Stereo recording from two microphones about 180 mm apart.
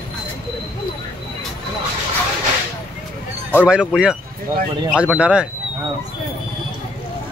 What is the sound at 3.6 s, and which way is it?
Speech, 5° right (ahead or behind).